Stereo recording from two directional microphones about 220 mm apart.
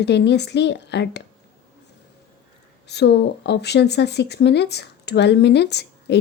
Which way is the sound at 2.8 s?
50° left (ahead or behind).